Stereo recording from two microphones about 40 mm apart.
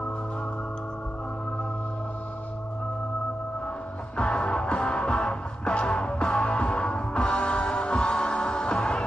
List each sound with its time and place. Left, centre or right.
4.2 s music: left